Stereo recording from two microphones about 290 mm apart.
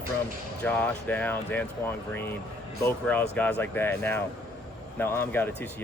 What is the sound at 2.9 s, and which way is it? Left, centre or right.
A man's voice, centre.